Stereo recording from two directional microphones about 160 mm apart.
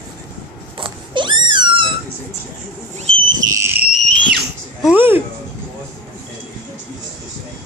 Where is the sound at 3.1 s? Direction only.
40° right (ahead or behind).